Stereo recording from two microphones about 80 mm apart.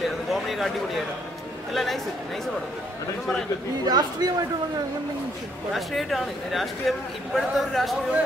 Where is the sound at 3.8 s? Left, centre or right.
Right.